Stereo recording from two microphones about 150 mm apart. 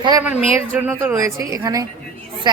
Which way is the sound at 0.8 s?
15° right (ahead or behind).